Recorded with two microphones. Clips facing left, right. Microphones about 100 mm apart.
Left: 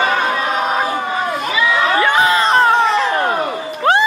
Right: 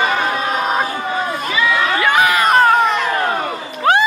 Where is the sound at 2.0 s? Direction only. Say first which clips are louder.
Right 2 dB; 25° left (ahead or behind).